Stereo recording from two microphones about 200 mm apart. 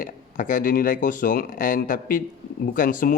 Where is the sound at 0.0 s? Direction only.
45° left (ahead or behind).